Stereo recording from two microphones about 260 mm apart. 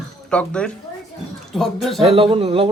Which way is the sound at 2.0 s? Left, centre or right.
Right.